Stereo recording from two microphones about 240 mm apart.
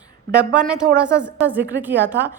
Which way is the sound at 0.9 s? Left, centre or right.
Right.